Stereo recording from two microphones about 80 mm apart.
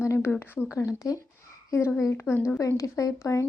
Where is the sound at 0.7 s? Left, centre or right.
Left.